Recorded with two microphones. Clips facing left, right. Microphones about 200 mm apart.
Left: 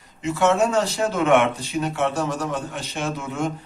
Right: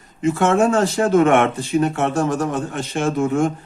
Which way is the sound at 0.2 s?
50° right (ahead or behind).